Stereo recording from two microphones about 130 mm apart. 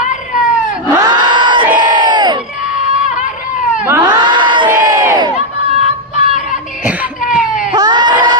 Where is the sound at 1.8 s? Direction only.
35° right (ahead or behind).